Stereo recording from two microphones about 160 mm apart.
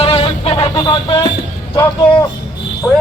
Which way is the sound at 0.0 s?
35° left (ahead or behind).